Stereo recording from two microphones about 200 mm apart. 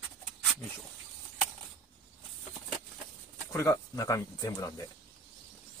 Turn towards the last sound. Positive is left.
turn(degrees=15)  # may be behind; listen again after turning